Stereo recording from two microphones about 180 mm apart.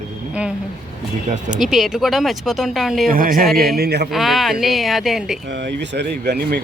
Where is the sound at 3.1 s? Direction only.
50° right (ahead or behind).